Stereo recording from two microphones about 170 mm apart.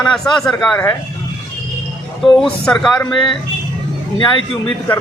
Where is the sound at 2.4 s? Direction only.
5° left (ahead or behind).